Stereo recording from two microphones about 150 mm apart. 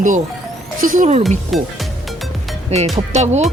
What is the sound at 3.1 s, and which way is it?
Speech, 50° right (ahead or behind).